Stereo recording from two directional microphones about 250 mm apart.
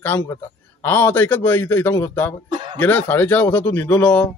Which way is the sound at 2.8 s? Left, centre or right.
Centre.